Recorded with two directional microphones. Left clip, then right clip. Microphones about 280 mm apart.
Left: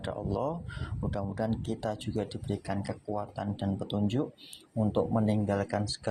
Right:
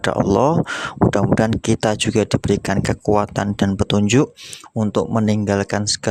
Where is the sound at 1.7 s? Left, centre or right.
Right.